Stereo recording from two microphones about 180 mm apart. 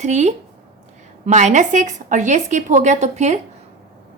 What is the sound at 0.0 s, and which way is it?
A woman's voice, 40° right (ahead or behind).